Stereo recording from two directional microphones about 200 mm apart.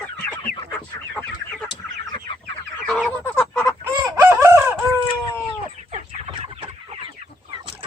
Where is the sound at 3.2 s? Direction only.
10° left (ahead or behind).